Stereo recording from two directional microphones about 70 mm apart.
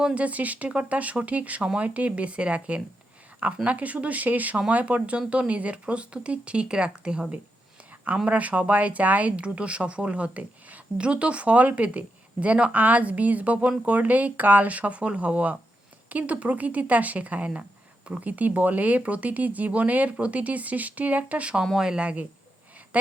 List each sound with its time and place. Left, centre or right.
0.0 s speech: centre
21.6 s speech: centre